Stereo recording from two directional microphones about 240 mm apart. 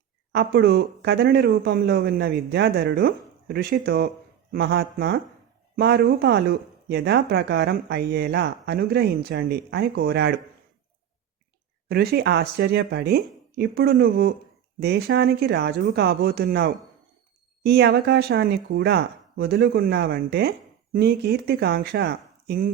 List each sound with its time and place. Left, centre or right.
0.3 s speech: right
11.9 s speech: right